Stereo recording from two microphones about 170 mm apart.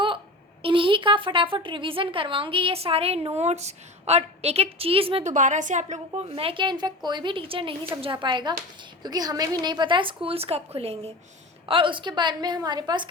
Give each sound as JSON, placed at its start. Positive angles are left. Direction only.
{"t": 0.6, "sound": "a woman's voice", "side_deg": -30}
{"t": 5.3, "sound": "a woman's voice", "side_deg": -45}